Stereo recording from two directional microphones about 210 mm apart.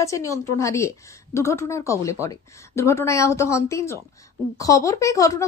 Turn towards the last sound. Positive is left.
turn(degrees=15)  # may be behind; listen again after turning